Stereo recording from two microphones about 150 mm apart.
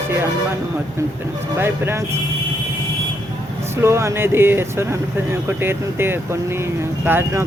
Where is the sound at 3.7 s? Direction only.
15° right (ahead or behind).